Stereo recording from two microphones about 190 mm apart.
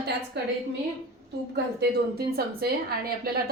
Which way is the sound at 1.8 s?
55° right (ahead or behind).